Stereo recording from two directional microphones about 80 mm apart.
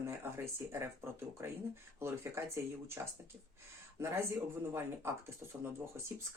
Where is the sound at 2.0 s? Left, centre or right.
Right.